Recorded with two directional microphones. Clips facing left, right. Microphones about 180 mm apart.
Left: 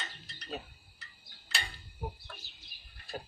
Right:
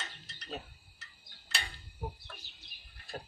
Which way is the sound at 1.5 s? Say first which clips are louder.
Left 1 dB; centre (ahead or behind).